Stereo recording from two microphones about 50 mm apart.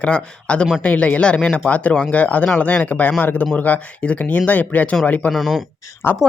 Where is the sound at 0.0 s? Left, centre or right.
Left.